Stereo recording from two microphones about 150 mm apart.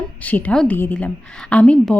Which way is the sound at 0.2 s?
10° left (ahead or behind).